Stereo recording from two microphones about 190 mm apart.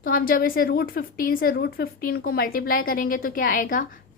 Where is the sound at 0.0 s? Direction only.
50° left (ahead or behind).